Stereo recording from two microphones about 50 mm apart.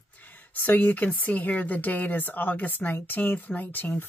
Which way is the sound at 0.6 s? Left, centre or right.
Left.